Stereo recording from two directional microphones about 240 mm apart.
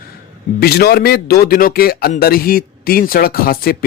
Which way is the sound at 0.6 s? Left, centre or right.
Left.